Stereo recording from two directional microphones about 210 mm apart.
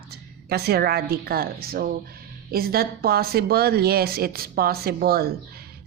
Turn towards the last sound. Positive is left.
turn(degrees=-45)  # may be behind; listen again after turning